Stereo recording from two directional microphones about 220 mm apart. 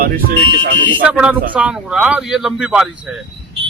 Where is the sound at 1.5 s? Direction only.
5° right (ahead or behind).